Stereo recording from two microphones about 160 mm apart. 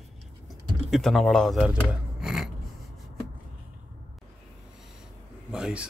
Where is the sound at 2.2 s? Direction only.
Centre (ahead or behind).